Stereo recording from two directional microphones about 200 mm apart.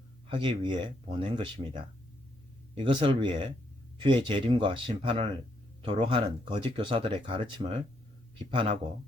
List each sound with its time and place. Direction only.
0.3 s speech: 25° right (ahead or behind)